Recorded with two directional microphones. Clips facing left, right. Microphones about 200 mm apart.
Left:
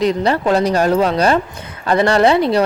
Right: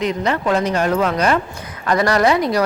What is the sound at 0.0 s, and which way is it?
A woman's voice, 35° left (ahead or behind).